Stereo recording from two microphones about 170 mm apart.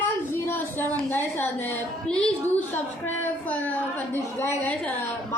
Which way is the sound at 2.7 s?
10° left (ahead or behind).